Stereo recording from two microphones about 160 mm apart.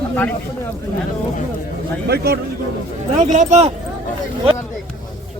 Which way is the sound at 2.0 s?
80° right.